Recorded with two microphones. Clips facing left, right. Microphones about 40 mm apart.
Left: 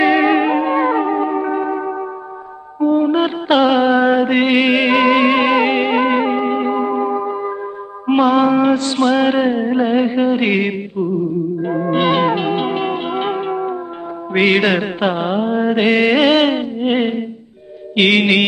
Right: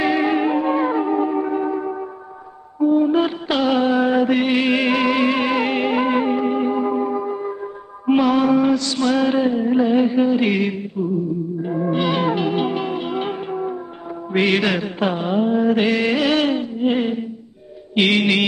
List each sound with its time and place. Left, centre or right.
0.0 s music: left
8.2 s a sound: left
11.6 s music: left
14.4 s mantra: left
17.9 s music: left